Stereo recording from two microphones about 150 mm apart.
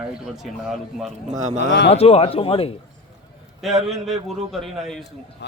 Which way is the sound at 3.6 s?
Centre (ahead or behind).